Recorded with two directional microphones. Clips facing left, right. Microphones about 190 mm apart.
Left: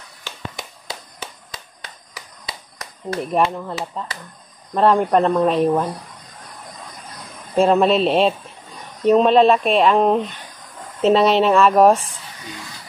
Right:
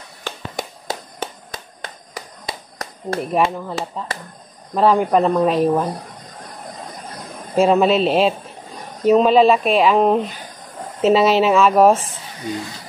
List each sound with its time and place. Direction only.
0.2 s a sound: 50° right (ahead or behind)
3.2 s speech: centre (ahead or behind)
7.5 s speech: 5° right (ahead or behind)